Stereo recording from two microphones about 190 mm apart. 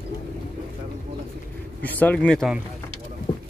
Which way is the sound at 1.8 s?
10° left (ahead or behind).